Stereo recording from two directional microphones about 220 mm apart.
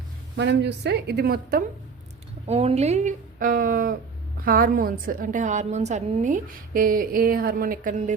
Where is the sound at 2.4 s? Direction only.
30° right (ahead or behind).